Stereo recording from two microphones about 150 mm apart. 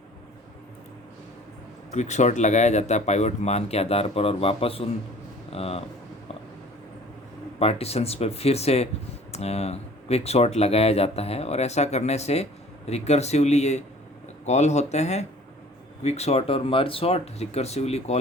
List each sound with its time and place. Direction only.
1.9 s speech: 50° left (ahead or behind)
5.5 s a sound: 40° left (ahead or behind)
7.6 s speech: 40° left (ahead or behind)